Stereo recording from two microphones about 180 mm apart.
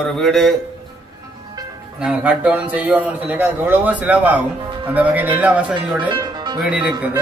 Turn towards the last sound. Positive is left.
turn(degrees=-5)  # may be behind; listen again after turning